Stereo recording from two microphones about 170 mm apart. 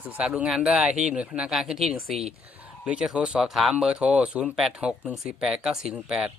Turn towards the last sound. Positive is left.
turn(degrees=-5)  # may be behind; listen again after turning